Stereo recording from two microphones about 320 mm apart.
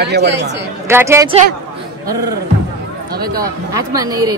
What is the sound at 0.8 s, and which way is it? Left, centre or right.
Speech, centre.